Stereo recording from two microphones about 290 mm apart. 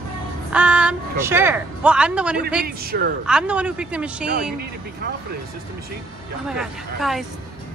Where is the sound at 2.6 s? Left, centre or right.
Right.